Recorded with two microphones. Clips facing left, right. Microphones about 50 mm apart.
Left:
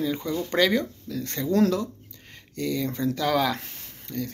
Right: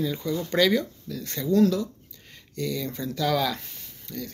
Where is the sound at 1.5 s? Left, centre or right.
Left.